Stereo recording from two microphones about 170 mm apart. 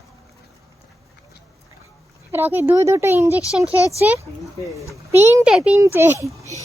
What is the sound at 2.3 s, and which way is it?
Speech, 10° right (ahead or behind).